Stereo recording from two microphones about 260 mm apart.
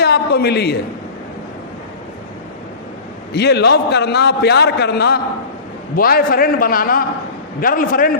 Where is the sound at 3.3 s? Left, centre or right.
Left.